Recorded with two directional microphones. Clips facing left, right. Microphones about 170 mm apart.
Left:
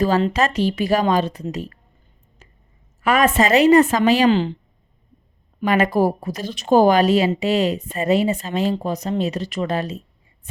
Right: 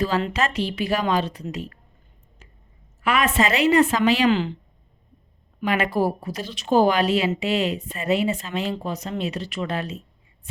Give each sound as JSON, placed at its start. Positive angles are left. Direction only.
{"t": 0.2, "sound": "speech", "side_deg": 40}
{"t": 3.0, "sound": "a woman's voice", "side_deg": 45}
{"t": 5.5, "sound": "speech", "side_deg": 40}